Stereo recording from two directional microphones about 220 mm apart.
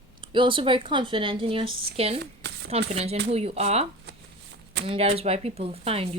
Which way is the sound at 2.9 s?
30° right (ahead or behind).